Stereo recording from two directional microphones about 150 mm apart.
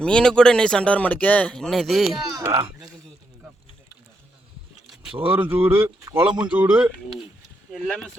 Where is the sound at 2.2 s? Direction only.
25° right (ahead or behind).